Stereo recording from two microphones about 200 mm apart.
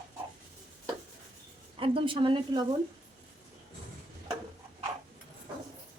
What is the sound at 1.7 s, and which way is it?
Speech, 25° right (ahead or behind).